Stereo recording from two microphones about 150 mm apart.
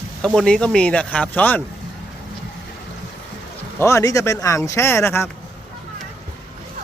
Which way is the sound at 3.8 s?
20° left (ahead or behind).